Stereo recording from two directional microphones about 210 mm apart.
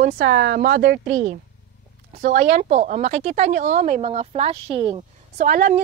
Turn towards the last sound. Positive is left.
turn(degrees=-40)  # may be behind; listen again after turning